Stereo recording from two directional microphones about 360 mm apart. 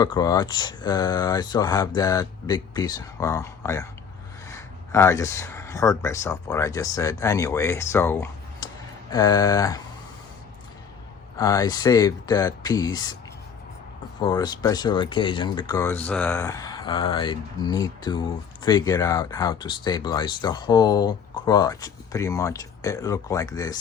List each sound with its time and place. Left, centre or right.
0.0 s speech: centre
11.3 s speech: centre
14.2 s speech: centre